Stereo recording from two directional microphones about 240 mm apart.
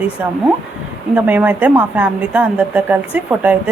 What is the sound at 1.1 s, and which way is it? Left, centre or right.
A woman's voice, centre.